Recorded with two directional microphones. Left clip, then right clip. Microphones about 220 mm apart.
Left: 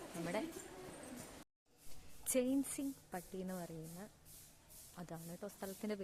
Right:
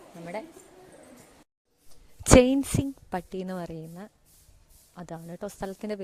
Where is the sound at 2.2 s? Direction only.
45° right (ahead or behind).